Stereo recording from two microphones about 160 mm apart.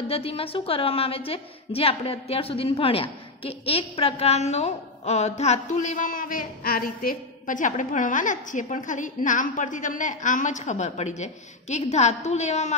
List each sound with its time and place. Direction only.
0.1 s a woman's voice: 35° left (ahead or behind)